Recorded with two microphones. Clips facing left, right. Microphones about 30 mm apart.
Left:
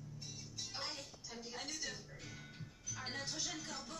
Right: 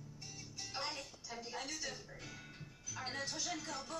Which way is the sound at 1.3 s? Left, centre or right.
Right.